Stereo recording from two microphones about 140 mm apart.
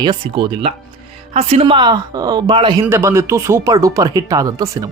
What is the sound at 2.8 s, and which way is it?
Speech, 20° right (ahead or behind).